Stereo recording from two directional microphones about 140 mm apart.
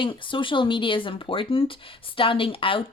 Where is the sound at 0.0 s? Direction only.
35° left (ahead or behind).